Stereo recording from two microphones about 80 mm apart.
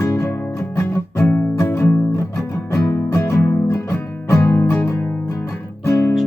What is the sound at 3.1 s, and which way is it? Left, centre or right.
Music, left.